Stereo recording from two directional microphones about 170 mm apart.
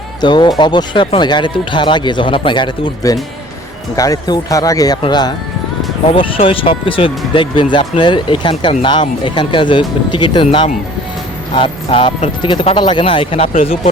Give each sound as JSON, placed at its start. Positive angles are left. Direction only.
{"t": 0.2, "sound": "speech", "side_deg": 25}